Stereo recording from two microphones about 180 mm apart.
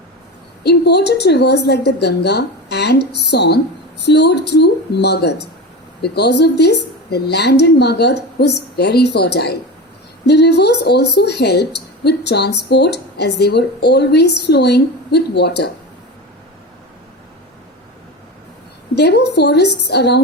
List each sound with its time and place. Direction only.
0.6 s a woman's voice: 65° left (ahead or behind)
18.9 s a woman's voice: 70° left (ahead or behind)